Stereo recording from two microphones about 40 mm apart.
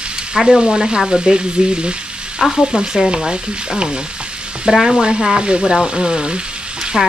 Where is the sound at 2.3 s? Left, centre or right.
Centre.